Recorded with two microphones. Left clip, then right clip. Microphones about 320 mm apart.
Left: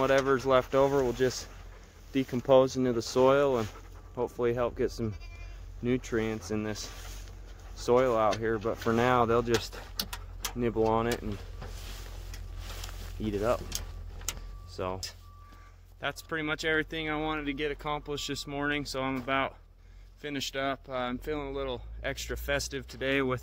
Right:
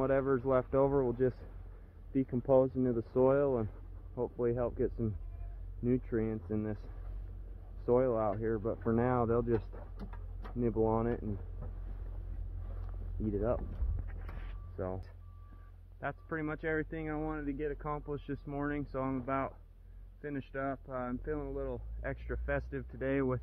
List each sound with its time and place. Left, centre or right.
0.0 s speech: centre
2.1 s speech: centre
7.8 s speech: centre
13.2 s speech: centre
14.8 s speech: centre